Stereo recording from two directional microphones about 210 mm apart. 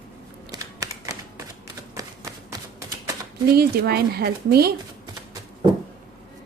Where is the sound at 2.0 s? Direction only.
15° right (ahead or behind).